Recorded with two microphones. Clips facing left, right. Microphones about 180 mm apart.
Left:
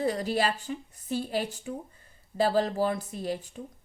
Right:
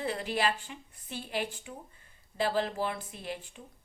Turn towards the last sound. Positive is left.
turn(degrees=40)  # may be behind; listen again after turning